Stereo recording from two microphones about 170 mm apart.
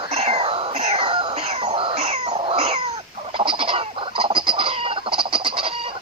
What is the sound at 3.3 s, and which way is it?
Fowl, 30° right (ahead or behind).